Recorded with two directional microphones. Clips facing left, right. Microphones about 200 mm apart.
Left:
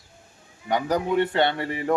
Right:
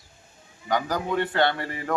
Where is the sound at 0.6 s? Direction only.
25° left (ahead or behind).